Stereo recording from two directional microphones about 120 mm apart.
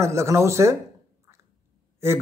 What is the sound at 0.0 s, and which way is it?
Mantra, 25° right (ahead or behind).